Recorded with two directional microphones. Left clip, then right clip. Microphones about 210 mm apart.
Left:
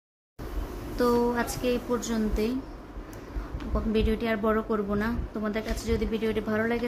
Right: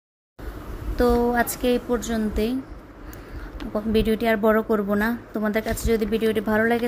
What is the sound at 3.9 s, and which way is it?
A woman's voice, 25° right (ahead or behind).